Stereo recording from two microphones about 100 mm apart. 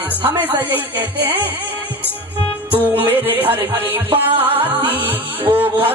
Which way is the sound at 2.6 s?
20° right (ahead or behind).